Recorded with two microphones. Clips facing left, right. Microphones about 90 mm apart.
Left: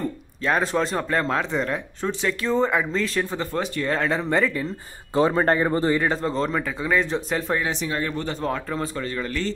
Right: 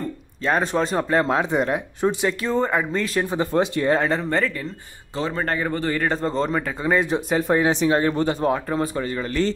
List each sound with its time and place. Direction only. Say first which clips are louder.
0.4 s speech: right 1 dB; centre (ahead or behind)
2.4 s speech: left 2 dB; 5° right (ahead or behind)
3.2 s speech: right 5 dB; 15° right (ahead or behind)
4.1 s speech: even; 10° left (ahead or behind)
5.3 s speech: left 4 dB; 30° left (ahead or behind)
6.0 s speech: right 1 dB; centre (ahead or behind); by 8.3 s 30° right (ahead or behind)
8.3 s speech: right 5 dB; 15° right (ahead or behind)